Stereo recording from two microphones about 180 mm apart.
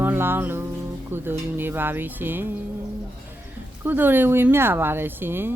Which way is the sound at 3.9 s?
10° right (ahead or behind).